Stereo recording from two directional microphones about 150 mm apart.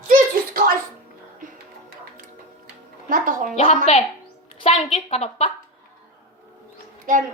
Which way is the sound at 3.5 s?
50° left (ahead or behind).